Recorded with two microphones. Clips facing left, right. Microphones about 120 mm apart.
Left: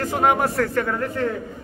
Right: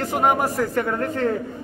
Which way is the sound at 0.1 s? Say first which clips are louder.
Even; 10° right (ahead or behind).